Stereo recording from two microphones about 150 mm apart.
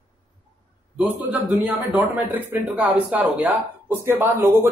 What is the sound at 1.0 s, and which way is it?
Speech, 10° right (ahead or behind).